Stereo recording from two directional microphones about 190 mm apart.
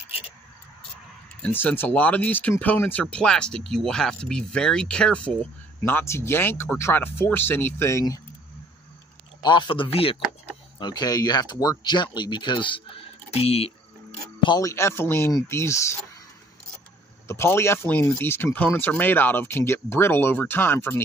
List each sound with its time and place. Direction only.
1.4 s speech: 10° left (ahead or behind)
9.4 s speech: 25° left (ahead or behind)
14.4 s speech: 20° left (ahead or behind)
17.3 s speech: 15° left (ahead or behind)